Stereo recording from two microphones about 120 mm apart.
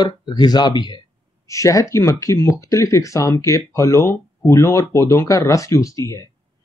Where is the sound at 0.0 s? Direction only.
35° left (ahead or behind).